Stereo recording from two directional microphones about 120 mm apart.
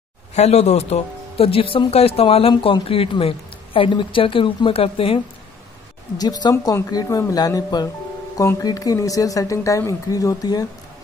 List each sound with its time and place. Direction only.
0.3 s speech: 65° left (ahead or behind)
6.1 s speech: 35° left (ahead or behind)